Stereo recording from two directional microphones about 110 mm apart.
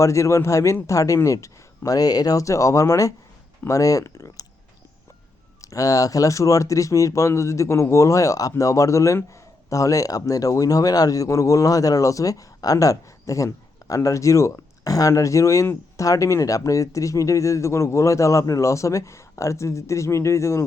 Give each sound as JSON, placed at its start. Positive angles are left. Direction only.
{"t": 0.0, "sound": "speech", "side_deg": 25}
{"t": 5.6, "sound": "speech", "side_deg": 30}